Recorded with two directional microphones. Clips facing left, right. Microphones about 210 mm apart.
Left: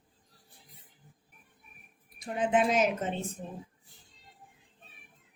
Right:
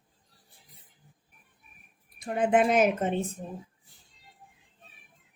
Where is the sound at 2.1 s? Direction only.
55° right (ahead or behind).